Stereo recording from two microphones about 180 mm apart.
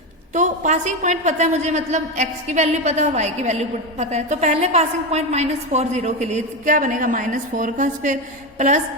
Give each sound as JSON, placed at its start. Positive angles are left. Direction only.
{"t": 0.3, "sound": "a woman's voice", "side_deg": -40}